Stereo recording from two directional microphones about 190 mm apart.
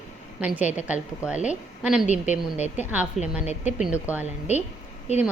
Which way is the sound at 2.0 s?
40° left (ahead or behind).